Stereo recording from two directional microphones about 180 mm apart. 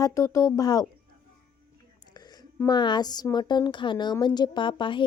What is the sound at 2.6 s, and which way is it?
A woman's voice, 25° left (ahead or behind).